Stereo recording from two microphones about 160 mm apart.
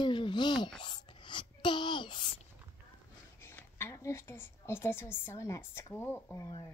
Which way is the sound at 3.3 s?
15° left (ahead or behind).